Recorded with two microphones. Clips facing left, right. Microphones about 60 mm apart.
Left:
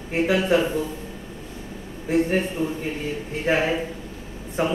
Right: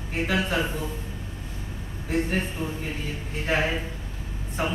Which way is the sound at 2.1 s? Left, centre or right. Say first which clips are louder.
Left 5 dB; centre.